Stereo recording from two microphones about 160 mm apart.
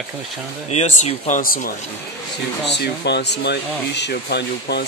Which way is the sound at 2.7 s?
90° left.